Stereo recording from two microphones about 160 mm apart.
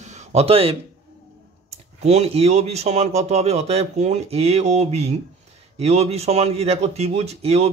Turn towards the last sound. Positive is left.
turn(degrees=-40)  # may be behind; listen again after turning